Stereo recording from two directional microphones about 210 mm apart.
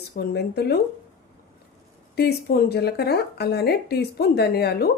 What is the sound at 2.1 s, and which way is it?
A woman's voice, 50° left (ahead or behind).